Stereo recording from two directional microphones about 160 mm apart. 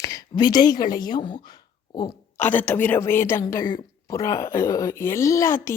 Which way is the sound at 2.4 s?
10° left (ahead or behind).